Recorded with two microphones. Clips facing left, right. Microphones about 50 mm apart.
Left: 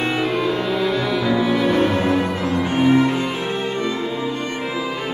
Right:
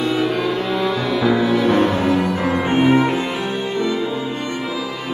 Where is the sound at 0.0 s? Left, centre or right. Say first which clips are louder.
Right 2 dB; left.